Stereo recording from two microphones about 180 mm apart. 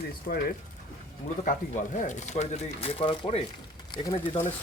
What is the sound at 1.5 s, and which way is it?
Speech, 45° left (ahead or behind).